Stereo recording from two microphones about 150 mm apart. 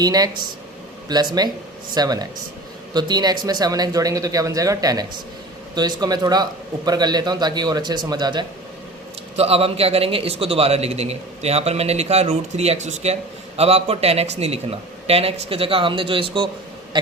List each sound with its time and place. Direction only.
0.0 s a man's voice: 25° right (ahead or behind)
9.3 s a man's voice: 40° right (ahead or behind)